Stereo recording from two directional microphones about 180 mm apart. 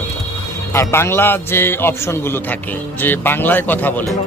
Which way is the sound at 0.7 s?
15° left (ahead or behind).